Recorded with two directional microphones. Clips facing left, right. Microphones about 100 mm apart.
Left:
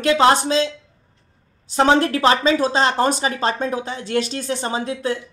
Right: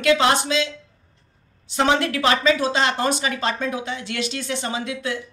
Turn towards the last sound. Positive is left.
turn(degrees=40)  # may be behind; listen again after turning